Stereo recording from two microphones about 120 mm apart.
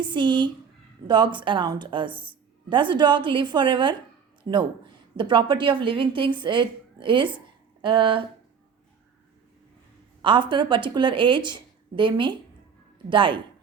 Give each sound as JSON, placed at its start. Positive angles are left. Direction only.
{"t": 0.0, "sound": "a woman's voice", "side_deg": -40}
{"t": 10.2, "sound": "speech", "side_deg": -40}